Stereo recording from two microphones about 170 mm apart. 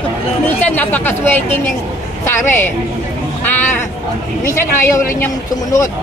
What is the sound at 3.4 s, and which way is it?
Sheep, 10° left (ahead or behind).